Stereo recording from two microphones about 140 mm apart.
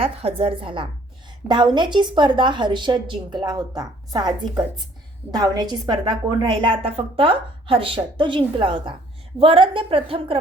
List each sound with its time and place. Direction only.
0.0 s a woman's voice: 45° right (ahead or behind)